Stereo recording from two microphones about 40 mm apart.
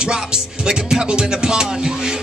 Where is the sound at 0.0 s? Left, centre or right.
Centre.